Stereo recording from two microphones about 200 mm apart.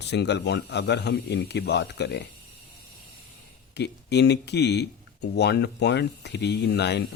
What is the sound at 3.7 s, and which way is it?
Speech, 55° left (ahead or behind).